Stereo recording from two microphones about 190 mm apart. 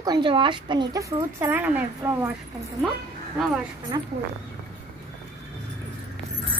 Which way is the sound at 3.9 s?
20° right (ahead or behind).